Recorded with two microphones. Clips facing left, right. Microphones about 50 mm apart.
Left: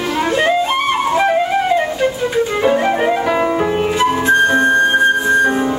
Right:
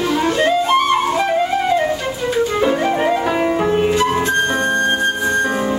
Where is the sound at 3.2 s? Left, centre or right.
Centre.